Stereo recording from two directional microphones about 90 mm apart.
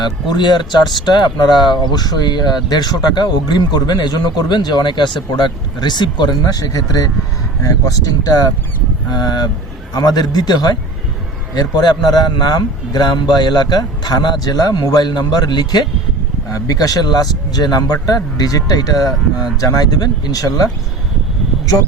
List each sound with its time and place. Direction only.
0.0 s speech: 55° left (ahead or behind)
16.5 s speech: 40° left (ahead or behind)